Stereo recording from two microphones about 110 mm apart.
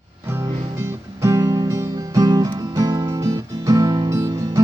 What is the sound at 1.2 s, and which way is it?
Music, 30° right (ahead or behind).